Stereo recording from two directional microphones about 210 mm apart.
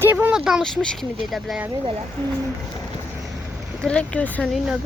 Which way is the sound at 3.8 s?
5° left (ahead or behind).